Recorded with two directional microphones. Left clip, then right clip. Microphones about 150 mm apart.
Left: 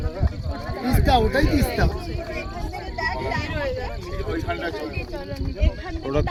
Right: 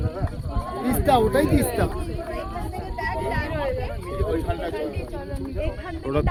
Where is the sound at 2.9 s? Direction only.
35° left (ahead or behind).